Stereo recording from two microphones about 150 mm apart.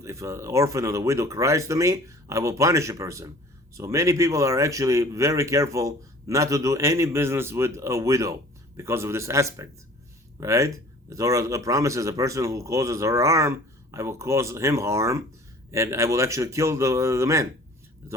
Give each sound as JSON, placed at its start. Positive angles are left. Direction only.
{"t": 0.0, "sound": "speech", "side_deg": -20}